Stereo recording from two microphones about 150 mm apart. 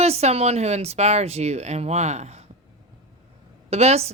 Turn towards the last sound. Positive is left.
turn(degrees=-45)  # may be behind; listen again after turning